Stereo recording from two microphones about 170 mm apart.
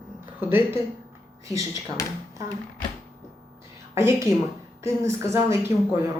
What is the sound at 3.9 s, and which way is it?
Speech, 15° right (ahead or behind).